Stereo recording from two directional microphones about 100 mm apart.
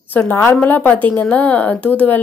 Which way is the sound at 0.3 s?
20° left (ahead or behind).